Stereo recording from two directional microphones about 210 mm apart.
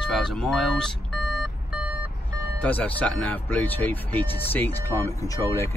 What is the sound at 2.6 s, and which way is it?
Speech, 5° left (ahead or behind).